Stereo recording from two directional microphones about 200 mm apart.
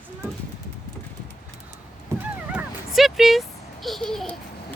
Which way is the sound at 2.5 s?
Centre (ahead or behind).